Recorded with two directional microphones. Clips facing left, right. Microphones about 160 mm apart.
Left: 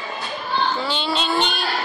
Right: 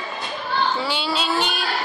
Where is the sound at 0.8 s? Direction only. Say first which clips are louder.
Left 1 dB; 5° right (ahead or behind).